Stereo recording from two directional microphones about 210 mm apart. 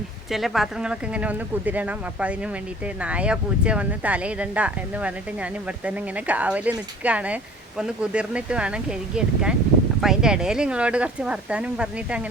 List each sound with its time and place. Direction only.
0.3 s speech: centre (ahead or behind)